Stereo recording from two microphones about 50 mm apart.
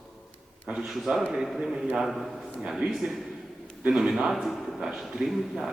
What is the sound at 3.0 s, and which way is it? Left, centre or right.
Speech, right.